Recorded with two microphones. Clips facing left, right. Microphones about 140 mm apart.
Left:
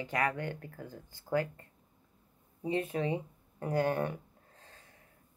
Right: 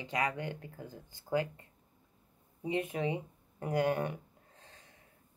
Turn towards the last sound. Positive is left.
turn(degrees=-15)  # may be behind; listen again after turning